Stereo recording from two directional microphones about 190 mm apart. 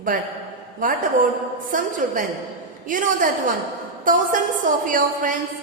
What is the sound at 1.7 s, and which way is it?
A woman's voice, 45° right (ahead or behind).